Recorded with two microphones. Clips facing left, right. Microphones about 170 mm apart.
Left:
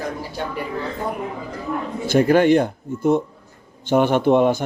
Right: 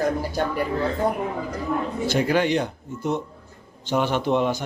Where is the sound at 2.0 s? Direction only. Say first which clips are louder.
Left 8 dB; 50° left (ahead or behind).